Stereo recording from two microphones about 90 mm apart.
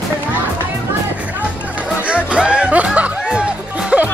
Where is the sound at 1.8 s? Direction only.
15° right (ahead or behind).